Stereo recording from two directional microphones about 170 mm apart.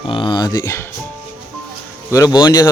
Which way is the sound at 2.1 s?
20° left (ahead or behind).